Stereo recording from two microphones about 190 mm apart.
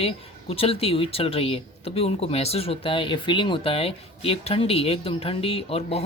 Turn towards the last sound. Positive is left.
turn(degrees=30)  # may be behind; listen again after turning